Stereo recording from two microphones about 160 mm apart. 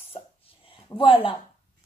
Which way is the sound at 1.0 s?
35° left (ahead or behind).